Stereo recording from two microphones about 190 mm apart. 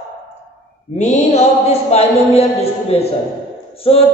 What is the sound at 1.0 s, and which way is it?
A man's voice, 35° left (ahead or behind).